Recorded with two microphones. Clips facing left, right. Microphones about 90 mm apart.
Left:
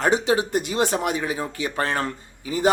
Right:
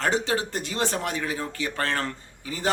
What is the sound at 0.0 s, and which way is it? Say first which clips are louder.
Speech: left 5 dB; 15° left (ahead or behind).